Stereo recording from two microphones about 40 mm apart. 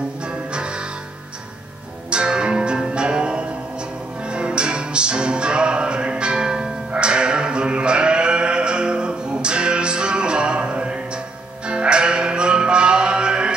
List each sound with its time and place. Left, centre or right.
0.2 s music: right
2.0 s music: right